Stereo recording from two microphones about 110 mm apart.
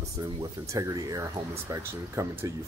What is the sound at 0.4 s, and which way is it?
Speech, 30° right (ahead or behind).